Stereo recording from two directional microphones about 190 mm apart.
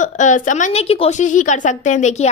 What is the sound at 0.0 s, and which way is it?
A woman's voice, 40° left (ahead or behind).